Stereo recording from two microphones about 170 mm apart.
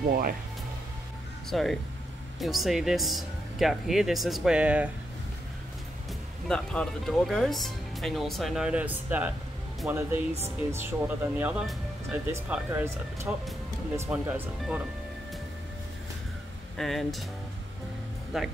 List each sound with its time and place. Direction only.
0.1 s speech: 60° right (ahead or behind)
1.5 s speech: centre (ahead or behind)
6.4 s speech: 5° left (ahead or behind); by 14.4 s 10° right (ahead or behind)
16.7 s speech: centre (ahead or behind)
18.3 s speech: 5° right (ahead or behind)